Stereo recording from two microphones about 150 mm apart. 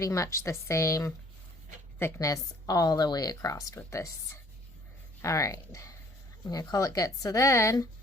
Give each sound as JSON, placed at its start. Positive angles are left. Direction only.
{"t": 0.0, "sound": "a woman's voice", "side_deg": 20}
{"t": 5.2, "sound": "a woman's voice", "side_deg": 20}